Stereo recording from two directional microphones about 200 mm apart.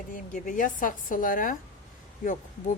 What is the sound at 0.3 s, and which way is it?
Speech, 40° left (ahead or behind).